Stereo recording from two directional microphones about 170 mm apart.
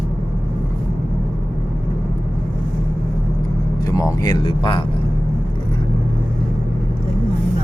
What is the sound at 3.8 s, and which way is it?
Vehicle, 20° left (ahead or behind).